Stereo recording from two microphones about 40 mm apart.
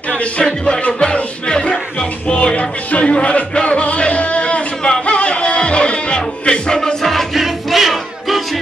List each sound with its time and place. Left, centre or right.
0.7 s music: left
7.0 s music: centre